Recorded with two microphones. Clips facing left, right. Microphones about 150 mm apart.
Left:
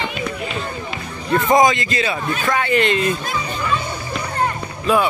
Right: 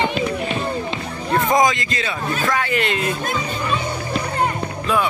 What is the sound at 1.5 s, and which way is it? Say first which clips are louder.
A man's voice: left 4 dB; centre (ahead or behind).